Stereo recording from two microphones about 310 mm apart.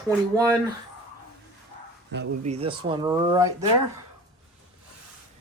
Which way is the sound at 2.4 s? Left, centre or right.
Centre.